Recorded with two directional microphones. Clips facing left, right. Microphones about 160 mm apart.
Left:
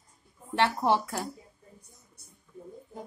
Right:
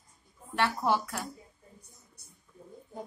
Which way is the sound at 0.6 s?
30° left (ahead or behind).